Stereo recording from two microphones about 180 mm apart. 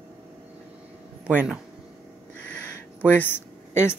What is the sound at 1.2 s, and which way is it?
Speech, 10° right (ahead or behind).